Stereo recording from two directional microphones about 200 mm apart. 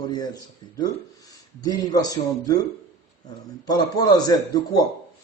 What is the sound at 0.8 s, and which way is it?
Speech, 20° left (ahead or behind).